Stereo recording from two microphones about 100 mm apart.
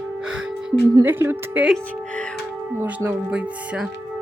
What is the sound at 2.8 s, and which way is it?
Speech, 20° right (ahead or behind).